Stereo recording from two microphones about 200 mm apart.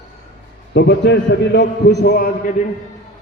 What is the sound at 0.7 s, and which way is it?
A man's voice, 60° left (ahead or behind).